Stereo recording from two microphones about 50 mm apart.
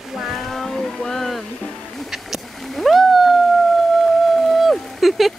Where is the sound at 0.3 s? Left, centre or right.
Centre.